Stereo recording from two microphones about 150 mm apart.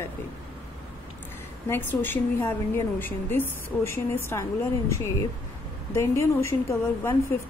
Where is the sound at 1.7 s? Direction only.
15° left (ahead or behind).